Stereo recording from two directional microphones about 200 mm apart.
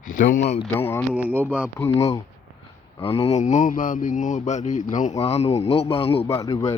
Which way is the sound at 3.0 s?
30° left (ahead or behind).